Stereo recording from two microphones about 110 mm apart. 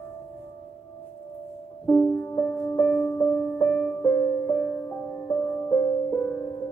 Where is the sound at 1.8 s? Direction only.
15° left (ahead or behind).